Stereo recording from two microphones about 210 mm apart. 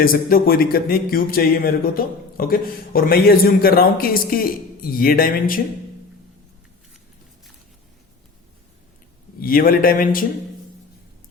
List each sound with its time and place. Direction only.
0.0 s speech: 45° left (ahead or behind)
9.4 s speech: 45° left (ahead or behind)